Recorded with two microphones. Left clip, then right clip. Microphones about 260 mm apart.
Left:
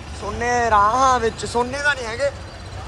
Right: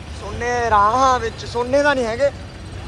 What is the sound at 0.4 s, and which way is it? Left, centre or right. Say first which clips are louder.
Speech: even; centre.